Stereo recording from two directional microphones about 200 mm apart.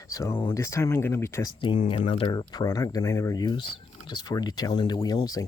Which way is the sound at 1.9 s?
25° left (ahead or behind).